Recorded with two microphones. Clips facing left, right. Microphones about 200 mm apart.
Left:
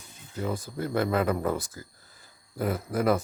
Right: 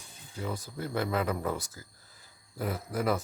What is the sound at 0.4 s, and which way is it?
Speech, 50° left (ahead or behind).